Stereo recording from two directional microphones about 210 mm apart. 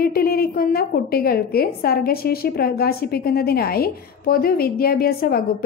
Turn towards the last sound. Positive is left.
turn(degrees=45)  # may be behind; listen again after turning